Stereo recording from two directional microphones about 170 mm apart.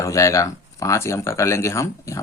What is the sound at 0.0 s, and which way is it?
Speech, 20° left (ahead or behind).